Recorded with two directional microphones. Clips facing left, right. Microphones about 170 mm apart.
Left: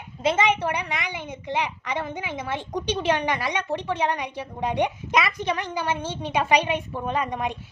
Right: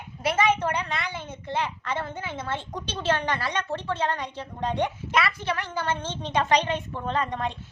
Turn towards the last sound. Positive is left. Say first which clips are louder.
# left 1 dB
turn(degrees=10)  # may be behind; listen again after turning